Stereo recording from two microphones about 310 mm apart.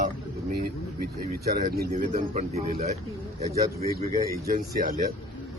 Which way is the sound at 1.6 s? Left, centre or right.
Right.